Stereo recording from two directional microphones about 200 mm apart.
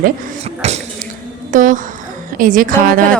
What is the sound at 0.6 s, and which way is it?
A woman's voice, 35° right (ahead or behind).